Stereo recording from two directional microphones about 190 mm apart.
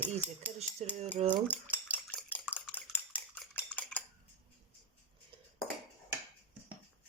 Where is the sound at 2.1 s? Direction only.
10° left (ahead or behind).